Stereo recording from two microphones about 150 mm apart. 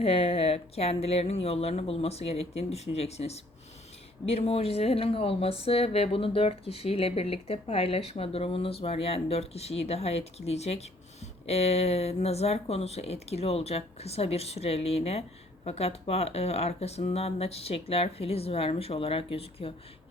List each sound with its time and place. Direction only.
0.0 s speech: 40° left (ahead or behind)